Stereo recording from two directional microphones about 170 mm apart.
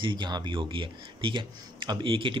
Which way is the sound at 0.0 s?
25° right (ahead or behind).